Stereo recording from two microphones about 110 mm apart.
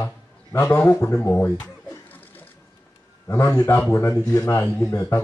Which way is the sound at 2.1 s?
15° left (ahead or behind).